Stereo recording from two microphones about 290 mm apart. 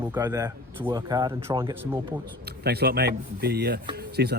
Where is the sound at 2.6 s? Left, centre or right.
Right.